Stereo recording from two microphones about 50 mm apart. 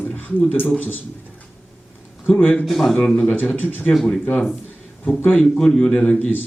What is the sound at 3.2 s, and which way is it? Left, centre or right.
Speech, left.